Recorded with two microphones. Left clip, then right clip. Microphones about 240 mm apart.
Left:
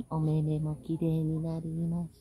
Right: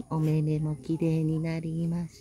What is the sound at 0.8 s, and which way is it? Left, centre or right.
Speech, right.